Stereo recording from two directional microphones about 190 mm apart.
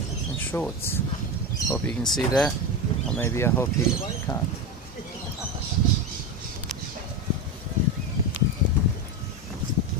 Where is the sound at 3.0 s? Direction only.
5° left (ahead or behind).